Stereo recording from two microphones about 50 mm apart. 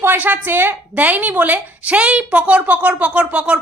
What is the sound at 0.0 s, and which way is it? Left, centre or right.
A woman's voice, right.